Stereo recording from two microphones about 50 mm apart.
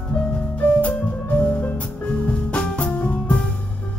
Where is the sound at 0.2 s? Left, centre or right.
Left.